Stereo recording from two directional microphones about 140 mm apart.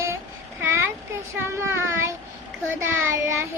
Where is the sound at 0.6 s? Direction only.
15° right (ahead or behind).